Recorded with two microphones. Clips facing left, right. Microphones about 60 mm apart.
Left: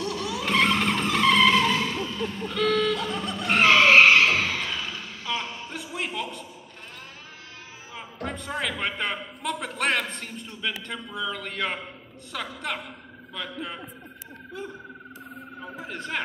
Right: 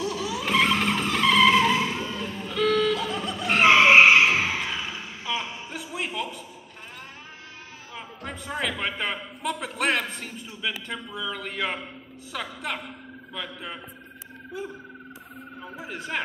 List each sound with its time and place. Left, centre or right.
0.0 s skidding: centre
3.6 s skidding: centre
5.7 s a sound: centre
7.9 s a man's voice: centre